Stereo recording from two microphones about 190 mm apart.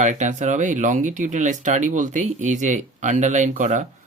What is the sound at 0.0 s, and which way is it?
Speech, 40° right (ahead or behind).